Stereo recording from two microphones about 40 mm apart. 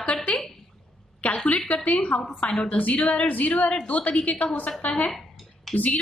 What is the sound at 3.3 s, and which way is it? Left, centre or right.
A woman's voice, left.